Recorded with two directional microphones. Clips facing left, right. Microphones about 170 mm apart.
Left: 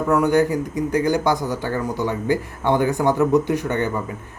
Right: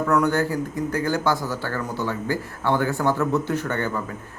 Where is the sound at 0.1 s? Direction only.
15° left (ahead or behind).